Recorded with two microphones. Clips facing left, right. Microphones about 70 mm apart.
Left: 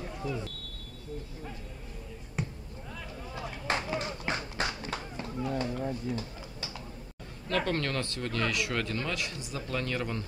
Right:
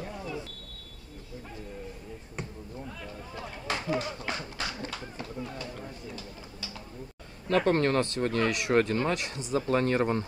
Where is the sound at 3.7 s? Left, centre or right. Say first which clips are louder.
Right 1 dB; left.